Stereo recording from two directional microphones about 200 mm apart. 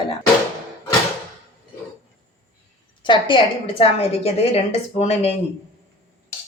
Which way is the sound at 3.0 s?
25° left (ahead or behind).